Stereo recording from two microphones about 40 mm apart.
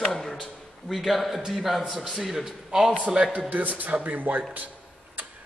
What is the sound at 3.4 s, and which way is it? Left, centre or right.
Speech, right.